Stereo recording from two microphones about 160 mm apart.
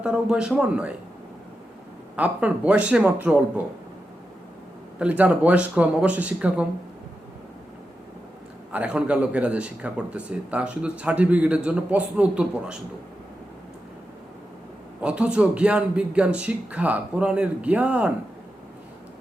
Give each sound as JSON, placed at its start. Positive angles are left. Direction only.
{"t": 0.0, "sound": "speech", "side_deg": -5}
{"t": 2.1, "sound": "speech", "side_deg": -10}
{"t": 4.9, "sound": "speech", "side_deg": -10}
{"t": 8.7, "sound": "speech", "side_deg": -5}
{"t": 15.0, "sound": "speech", "side_deg": -5}